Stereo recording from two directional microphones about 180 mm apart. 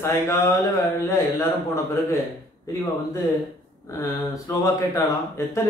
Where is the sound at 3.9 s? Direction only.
20° left (ahead or behind).